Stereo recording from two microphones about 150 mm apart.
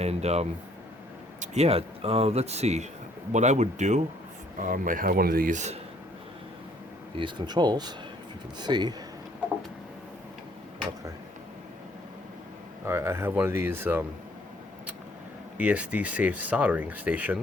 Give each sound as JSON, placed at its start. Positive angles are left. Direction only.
{"t": 0.0, "sound": "speech", "side_deg": -45}
{"t": 4.5, "sound": "speech", "side_deg": -65}
{"t": 7.2, "sound": "speech", "side_deg": -30}
{"t": 12.8, "sound": "speech", "side_deg": -15}
{"t": 15.5, "sound": "speech", "side_deg": -10}